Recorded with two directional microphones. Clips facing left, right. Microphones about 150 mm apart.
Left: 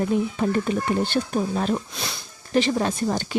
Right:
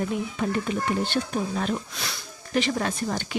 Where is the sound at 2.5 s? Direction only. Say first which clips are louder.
Left 4 dB; 30° left (ahead or behind).